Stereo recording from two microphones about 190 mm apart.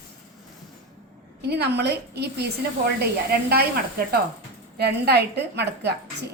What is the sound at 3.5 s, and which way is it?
Speech, 55° right (ahead or behind).